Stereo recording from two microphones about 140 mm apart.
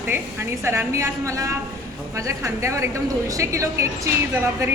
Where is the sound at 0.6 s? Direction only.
20° right (ahead or behind).